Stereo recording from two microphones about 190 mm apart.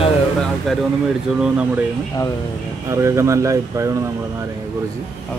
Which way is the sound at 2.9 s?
15° right (ahead or behind).